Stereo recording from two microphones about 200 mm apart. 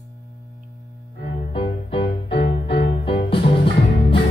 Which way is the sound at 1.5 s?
25° left (ahead or behind).